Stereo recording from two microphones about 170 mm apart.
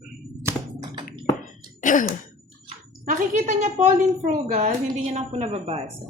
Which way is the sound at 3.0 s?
50° right (ahead or behind).